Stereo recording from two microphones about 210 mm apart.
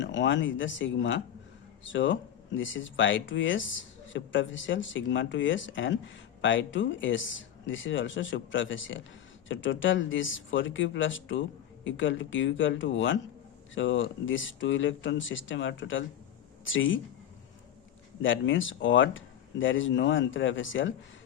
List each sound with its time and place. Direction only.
0.0 s speech: 60° left (ahead or behind)
18.2 s speech: 65° left (ahead or behind)